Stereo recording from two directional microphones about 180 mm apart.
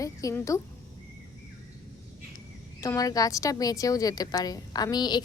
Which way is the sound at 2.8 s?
20° left (ahead or behind).